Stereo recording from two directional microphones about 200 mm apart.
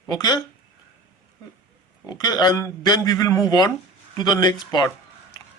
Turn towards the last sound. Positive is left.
turn(degrees=20)  # may be behind; listen again after turning